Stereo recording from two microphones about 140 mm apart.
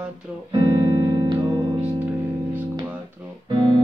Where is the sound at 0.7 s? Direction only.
20° right (ahead or behind).